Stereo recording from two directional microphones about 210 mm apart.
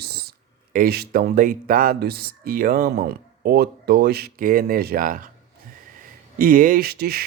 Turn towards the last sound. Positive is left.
turn(degrees=-45)  # may be behind; listen again after turning